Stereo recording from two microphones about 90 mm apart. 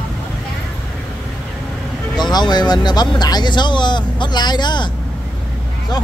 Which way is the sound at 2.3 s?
50° left (ahead or behind).